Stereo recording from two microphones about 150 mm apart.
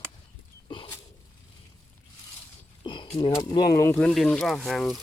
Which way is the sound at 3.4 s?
30° left (ahead or behind).